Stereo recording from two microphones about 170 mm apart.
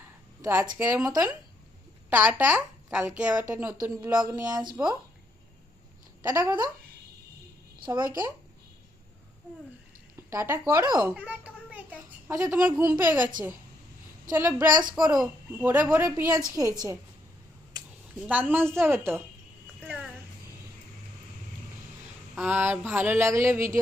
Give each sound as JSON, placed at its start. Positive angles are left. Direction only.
{"t": 0.4, "sound": "a woman's voice", "side_deg": -20}
{"t": 6.2, "sound": "speech", "side_deg": -15}
{"t": 10.2, "sound": "speech", "side_deg": -15}
{"t": 11.0, "sound": "a sound", "side_deg": -10}
{"t": 12.3, "sound": "speech", "side_deg": -20}
{"t": 14.3, "sound": "speech", "side_deg": -15}
{"t": 14.9, "sound": "a woman's voice", "side_deg": -25}
{"t": 15.2, "sound": "a woman's voice", "side_deg": -10}
{"t": 18.2, "sound": "speech", "side_deg": -10}
{"t": 22.4, "sound": "speech", "side_deg": -10}